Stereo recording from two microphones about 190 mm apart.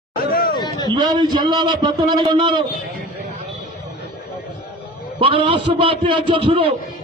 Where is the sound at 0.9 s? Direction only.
20° right (ahead or behind).